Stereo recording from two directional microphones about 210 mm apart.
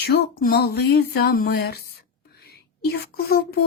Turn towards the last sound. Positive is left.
turn(degrees=50)  # may be behind; listen again after turning